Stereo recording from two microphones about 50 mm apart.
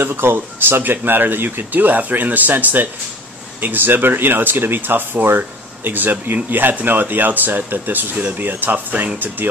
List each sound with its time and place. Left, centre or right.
0.0 s speech: right